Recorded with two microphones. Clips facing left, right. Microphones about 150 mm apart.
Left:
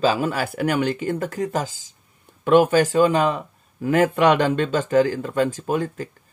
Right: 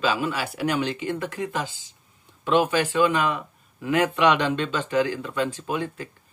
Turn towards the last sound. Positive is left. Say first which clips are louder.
# left 5 dB
turn(degrees=45)  # may be behind; listen again after turning